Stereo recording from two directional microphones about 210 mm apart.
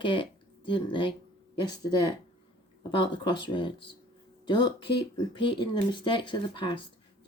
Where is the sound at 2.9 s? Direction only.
25° left (ahead or behind).